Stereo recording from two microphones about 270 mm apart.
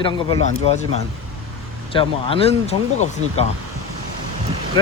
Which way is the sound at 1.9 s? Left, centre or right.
Centre.